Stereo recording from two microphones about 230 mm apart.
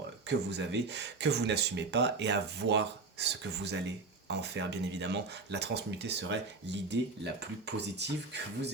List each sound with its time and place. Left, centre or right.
0.3 s speech: right